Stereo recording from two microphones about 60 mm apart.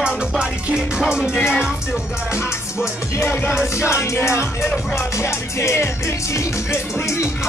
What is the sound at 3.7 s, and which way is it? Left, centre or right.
Music, left.